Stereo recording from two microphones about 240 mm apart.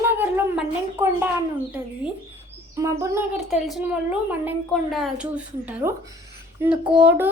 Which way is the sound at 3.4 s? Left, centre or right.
Centre.